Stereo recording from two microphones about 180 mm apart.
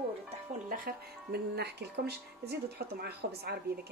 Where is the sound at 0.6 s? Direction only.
50° right (ahead or behind).